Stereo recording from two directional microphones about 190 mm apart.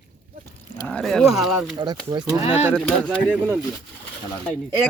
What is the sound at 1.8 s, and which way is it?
Speech, 25° right (ahead or behind).